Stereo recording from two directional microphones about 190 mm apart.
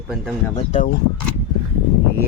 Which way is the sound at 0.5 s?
35° left (ahead or behind).